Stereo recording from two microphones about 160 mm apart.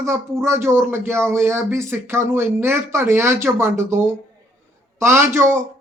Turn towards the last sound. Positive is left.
turn(degrees=-15)  # may be behind; listen again after turning